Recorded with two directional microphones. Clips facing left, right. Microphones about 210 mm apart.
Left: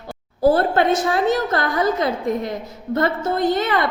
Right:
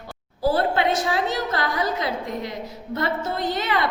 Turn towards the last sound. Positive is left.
turn(degrees=50)  # may be behind; listen again after turning